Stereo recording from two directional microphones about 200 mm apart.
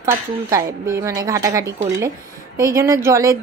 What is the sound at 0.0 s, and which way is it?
A woman's voice, 15° right (ahead or behind).